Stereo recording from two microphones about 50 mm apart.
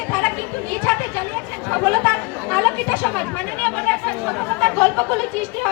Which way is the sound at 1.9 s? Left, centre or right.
Left.